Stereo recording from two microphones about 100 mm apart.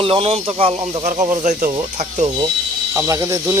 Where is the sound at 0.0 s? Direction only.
70° right (ahead or behind).